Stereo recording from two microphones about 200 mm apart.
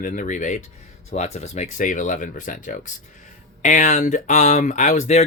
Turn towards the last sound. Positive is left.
turn(degrees=35)  # may be behind; listen again after turning